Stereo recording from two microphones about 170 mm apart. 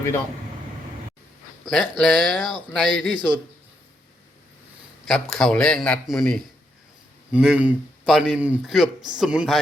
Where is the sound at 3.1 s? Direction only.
30° right (ahead or behind).